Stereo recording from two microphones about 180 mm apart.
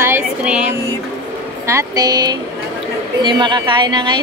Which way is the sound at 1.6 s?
20° right (ahead or behind).